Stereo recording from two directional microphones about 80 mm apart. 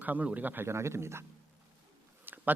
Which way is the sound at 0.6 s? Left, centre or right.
Right.